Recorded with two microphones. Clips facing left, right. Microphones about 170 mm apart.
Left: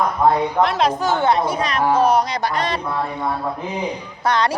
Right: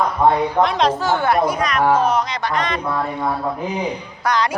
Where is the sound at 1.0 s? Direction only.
20° left (ahead or behind).